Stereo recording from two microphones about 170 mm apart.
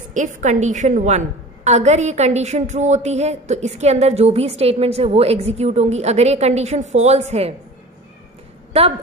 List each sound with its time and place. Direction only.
0.1 s a woman's voice: 45° right (ahead or behind)
8.7 s a woman's voice: 35° right (ahead or behind)